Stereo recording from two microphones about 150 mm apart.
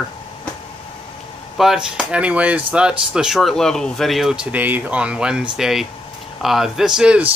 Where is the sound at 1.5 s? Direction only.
5° right (ahead or behind).